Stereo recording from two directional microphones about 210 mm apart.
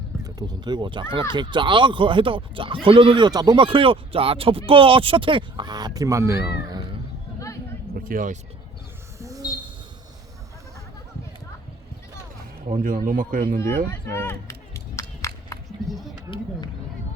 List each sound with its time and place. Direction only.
0.3 s speech: 20° right (ahead or behind)
7.9 s a man's voice: 40° right (ahead or behind)
9.1 s a sound: 15° right (ahead or behind)
12.6 s a man's voice: 40° right (ahead or behind)
13.9 s run: 10° left (ahead or behind)